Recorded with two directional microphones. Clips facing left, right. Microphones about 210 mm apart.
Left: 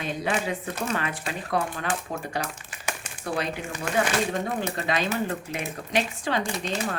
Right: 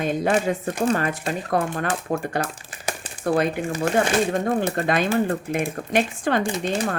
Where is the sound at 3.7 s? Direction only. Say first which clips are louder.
Right 3 dB; 35° right (ahead or behind).